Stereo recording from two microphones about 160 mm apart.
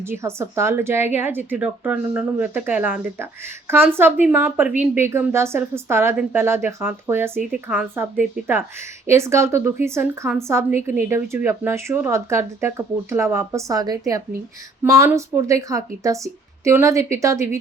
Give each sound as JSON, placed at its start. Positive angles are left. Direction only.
{"t": 0.0, "sound": "a woman's voice", "side_deg": -15}